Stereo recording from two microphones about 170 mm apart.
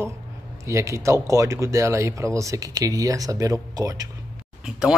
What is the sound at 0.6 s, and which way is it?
Speech, 15° right (ahead or behind).